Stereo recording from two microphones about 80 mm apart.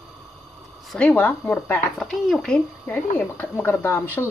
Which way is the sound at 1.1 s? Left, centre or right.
Left.